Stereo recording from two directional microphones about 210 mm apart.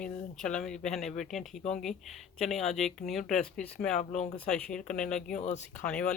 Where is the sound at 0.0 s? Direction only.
5° left (ahead or behind).